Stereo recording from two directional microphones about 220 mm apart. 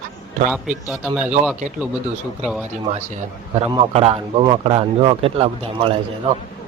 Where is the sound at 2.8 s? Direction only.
30° right (ahead or behind).